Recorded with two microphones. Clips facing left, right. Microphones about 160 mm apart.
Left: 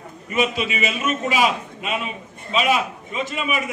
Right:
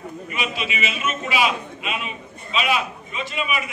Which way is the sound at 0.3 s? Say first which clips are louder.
Left 7 dB; 45° left (ahead or behind).